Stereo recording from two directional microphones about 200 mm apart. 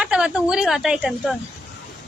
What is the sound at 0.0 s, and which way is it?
Speech, 5° right (ahead or behind).